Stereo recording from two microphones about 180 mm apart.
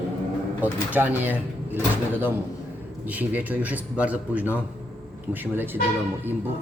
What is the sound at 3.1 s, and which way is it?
Speech, 10° right (ahead or behind).